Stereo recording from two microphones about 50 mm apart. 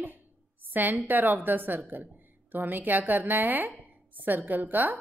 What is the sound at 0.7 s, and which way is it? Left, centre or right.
Speech, right.